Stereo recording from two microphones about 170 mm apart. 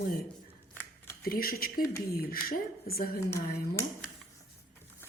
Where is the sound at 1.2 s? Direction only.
60° left (ahead or behind).